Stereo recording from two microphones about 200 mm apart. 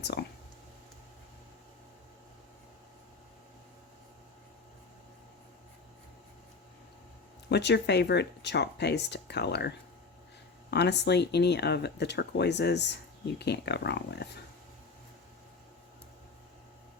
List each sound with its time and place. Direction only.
0.0 s speech: 55° left (ahead or behind)
7.5 s speech: 60° left (ahead or behind)